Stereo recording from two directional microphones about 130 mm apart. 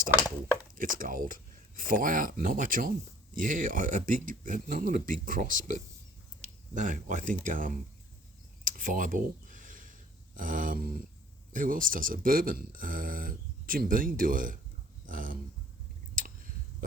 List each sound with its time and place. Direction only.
0.8 s speech: 90° right
7.4 s speech: 90° right
8.6 s a sound: 90° right
10.3 s speech: 90° right
15.0 s dog: 90° right
16.1 s a sound: 90° right